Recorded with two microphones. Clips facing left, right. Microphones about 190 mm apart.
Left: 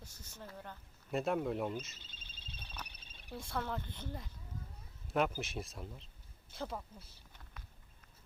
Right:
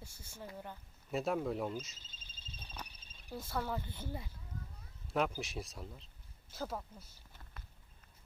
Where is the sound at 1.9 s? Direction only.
65° left (ahead or behind).